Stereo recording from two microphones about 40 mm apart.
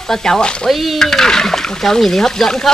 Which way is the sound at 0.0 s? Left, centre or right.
Centre.